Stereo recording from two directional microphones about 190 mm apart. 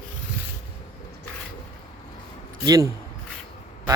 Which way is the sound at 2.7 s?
20° right (ahead or behind).